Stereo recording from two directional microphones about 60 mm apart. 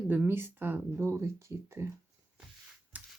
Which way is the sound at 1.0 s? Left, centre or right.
Right.